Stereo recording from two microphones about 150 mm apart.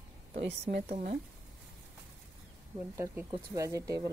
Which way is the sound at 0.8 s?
45° right (ahead or behind).